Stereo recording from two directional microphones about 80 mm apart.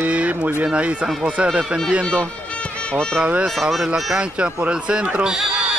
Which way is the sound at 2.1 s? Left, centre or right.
Centre.